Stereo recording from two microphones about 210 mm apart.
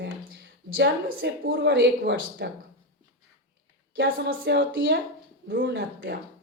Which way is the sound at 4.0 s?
55° right (ahead or behind).